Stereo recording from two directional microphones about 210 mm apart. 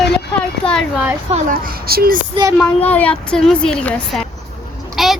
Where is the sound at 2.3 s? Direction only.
20° right (ahead or behind).